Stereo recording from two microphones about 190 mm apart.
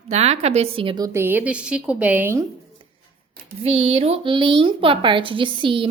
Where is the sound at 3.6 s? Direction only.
35° right (ahead or behind).